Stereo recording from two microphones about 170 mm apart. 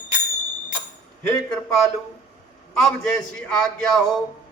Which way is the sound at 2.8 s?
5° left (ahead or behind).